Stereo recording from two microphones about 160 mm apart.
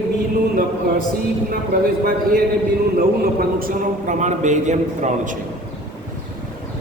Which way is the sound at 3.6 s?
50° right (ahead or behind).